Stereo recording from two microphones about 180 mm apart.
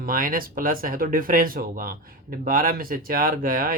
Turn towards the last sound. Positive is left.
turn(degrees=-50)  # may be behind; listen again after turning